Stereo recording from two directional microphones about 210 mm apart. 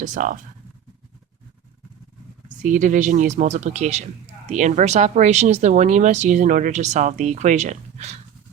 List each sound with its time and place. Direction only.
0.0 s speech: 40° right (ahead or behind)
2.6 s speech: 35° right (ahead or behind)